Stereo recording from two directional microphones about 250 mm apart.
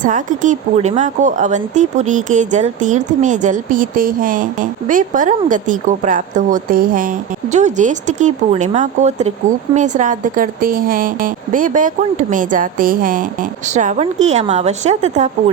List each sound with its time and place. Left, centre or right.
0.0 s a woman's voice: right